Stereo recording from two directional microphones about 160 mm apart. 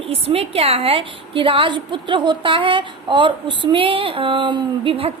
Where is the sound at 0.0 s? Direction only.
40° right (ahead or behind).